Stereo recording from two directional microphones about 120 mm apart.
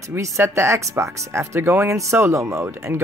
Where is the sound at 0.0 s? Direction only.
25° right (ahead or behind).